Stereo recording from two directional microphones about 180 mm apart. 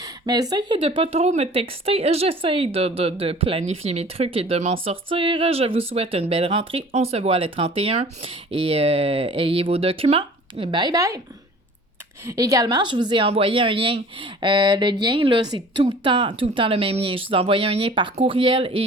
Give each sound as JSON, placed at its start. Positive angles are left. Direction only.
{"t": 0.0, "sound": "speech", "side_deg": -20}
{"t": 12.2, "sound": "a woman's voice", "side_deg": -20}